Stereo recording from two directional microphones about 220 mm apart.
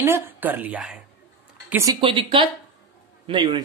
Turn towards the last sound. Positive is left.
turn(degrees=-20)  # may be behind; listen again after turning